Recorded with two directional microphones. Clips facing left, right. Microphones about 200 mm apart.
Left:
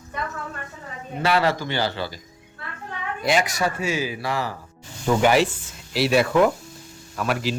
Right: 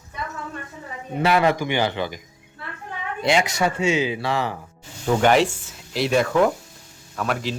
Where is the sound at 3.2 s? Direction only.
25° right (ahead or behind).